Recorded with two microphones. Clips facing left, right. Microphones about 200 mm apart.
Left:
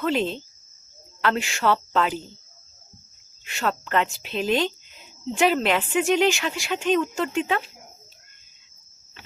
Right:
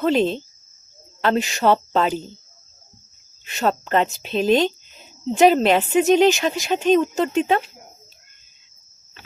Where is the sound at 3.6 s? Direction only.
30° right (ahead or behind).